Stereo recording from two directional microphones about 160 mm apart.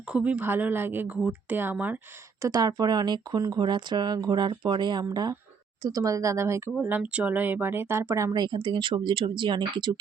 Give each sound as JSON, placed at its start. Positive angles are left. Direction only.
{"t": 0.1, "sound": "speech", "side_deg": -10}
{"t": 2.4, "sound": "speech", "side_deg": -25}